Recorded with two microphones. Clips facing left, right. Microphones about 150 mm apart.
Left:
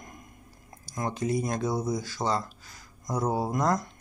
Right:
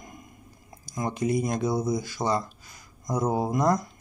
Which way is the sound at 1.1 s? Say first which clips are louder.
Right 3 dB; 15° right (ahead or behind).